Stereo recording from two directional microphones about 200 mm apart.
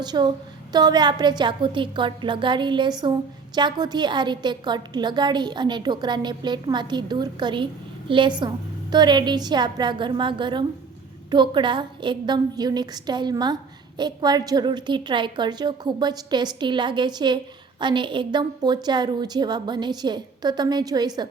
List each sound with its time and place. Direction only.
0.0 s a woman's voice: 20° right (ahead or behind)